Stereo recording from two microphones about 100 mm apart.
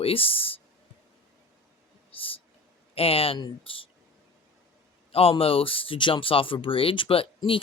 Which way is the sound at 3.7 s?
65° left (ahead or behind).